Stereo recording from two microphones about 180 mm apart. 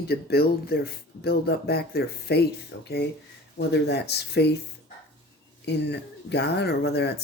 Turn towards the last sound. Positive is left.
turn(degrees=65)  # may be behind; listen again after turning